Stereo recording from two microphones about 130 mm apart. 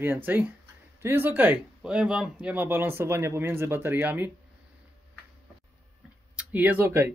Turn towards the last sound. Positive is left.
turn(degrees=-15)  # may be behind; listen again after turning